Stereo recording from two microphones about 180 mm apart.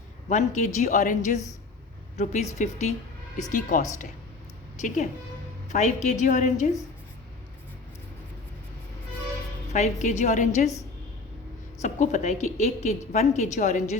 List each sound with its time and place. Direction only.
0.3 s a woman's voice: 40° left (ahead or behind)
5.6 s a woman's voice: 40° left (ahead or behind)
9.7 s a woman's voice: 40° left (ahead or behind)
11.8 s a woman's voice: 40° left (ahead or behind)